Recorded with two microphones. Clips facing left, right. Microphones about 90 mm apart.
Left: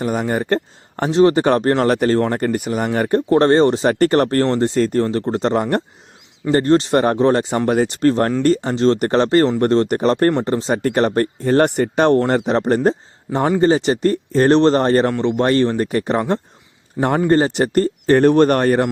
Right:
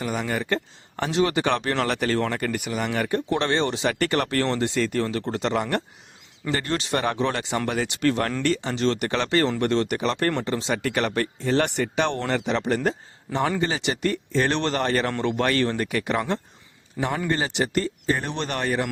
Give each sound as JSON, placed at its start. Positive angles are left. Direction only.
{"t": 0.0, "sound": "speech", "side_deg": 40}
{"t": 17.0, "sound": "speech", "side_deg": 45}